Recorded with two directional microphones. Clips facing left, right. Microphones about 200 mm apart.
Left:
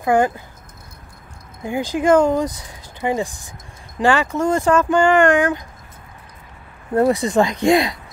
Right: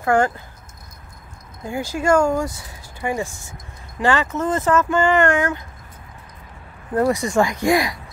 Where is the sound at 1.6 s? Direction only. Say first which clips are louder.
Left 4 dB; 15° left (ahead or behind).